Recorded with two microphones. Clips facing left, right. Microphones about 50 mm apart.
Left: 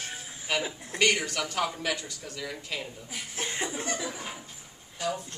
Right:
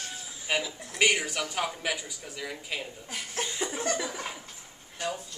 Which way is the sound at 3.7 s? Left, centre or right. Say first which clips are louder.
Right 3 dB; right.